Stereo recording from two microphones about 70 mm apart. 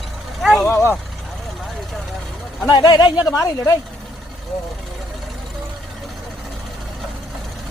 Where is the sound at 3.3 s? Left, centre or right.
Left.